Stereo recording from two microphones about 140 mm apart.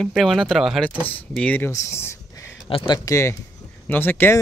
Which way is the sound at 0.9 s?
10° left (ahead or behind).